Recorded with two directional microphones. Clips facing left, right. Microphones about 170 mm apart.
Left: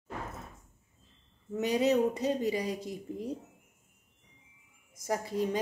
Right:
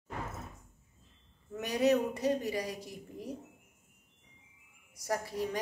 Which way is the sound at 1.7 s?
20° left (ahead or behind).